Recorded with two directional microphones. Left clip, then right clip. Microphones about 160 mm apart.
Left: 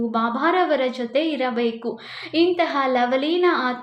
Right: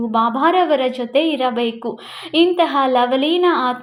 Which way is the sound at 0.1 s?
30° right (ahead or behind).